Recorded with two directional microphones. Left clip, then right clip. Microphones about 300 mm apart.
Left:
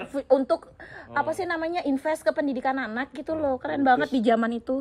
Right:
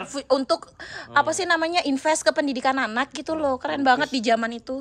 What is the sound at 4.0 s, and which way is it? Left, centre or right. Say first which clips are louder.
Speech: right 1 dB; centre.